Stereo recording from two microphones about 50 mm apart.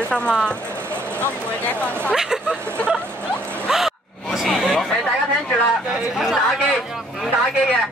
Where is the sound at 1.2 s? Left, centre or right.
Left.